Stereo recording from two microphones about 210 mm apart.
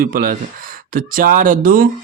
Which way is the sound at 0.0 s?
40° right (ahead or behind).